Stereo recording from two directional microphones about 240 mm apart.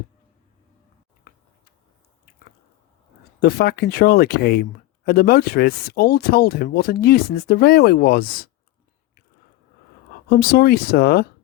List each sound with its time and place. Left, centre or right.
3.4 s speech: left
10.2 s speech: left